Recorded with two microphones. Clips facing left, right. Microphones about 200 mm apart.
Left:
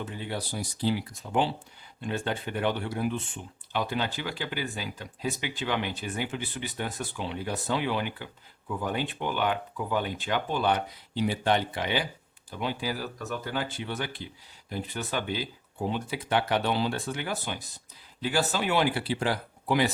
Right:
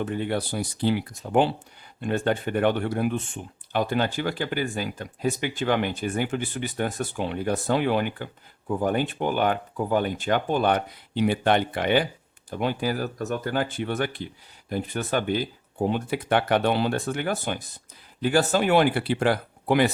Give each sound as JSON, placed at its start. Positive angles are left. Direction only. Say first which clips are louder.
{"t": 0.0, "sound": "speech", "louder": "right 8 dB", "side_deg": -60}